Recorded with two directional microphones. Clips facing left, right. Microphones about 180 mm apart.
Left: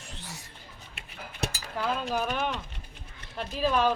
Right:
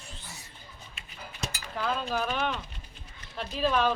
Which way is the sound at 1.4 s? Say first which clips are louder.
Left 4 dB; 65° left (ahead or behind).